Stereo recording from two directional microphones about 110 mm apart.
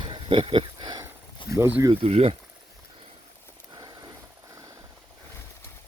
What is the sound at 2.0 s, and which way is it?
Speech, 65° right (ahead or behind).